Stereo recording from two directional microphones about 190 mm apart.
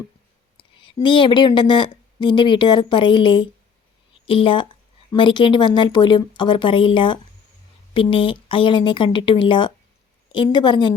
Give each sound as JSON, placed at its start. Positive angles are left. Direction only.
{"t": 0.5, "sound": "speech", "side_deg": 25}